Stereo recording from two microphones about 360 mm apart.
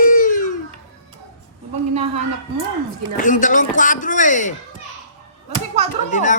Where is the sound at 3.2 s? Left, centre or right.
Left.